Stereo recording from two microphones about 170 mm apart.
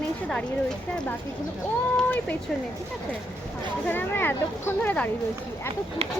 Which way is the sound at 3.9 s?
10° left (ahead or behind).